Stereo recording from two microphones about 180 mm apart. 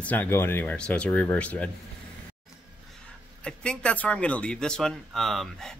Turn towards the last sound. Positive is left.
turn(degrees=0)  # may be behind; listen again after turning